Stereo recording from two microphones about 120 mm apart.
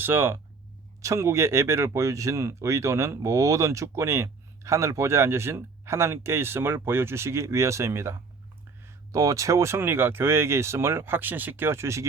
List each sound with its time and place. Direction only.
0.0 s speech: 20° right (ahead or behind)